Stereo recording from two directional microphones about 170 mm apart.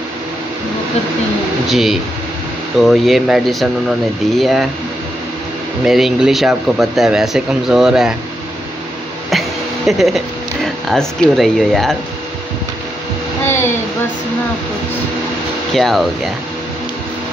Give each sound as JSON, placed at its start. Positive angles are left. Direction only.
{"t": 1.7, "sound": "speech", "side_deg": 0}
{"t": 5.9, "sound": "speech", "side_deg": 0}
{"t": 9.8, "sound": "speech", "side_deg": 0}
{"t": 13.5, "sound": "a sound", "side_deg": 15}
{"t": 15.7, "sound": "speech", "side_deg": 0}